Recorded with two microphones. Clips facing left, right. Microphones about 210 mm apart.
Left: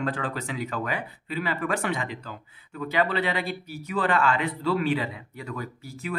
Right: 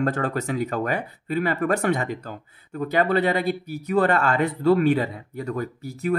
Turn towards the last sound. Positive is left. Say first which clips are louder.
# right 9 dB
turn(degrees=-45)  # may be behind; listen again after turning